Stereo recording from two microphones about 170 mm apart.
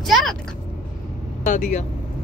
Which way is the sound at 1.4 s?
50° left (ahead or behind).